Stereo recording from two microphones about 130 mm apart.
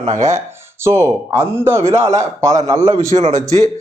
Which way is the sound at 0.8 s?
20° right (ahead or behind).